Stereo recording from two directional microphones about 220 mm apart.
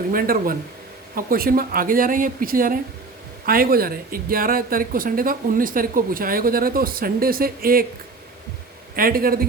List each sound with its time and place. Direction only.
0.1 s speech: 40° right (ahead or behind)
9.0 s speech: 40° right (ahead or behind)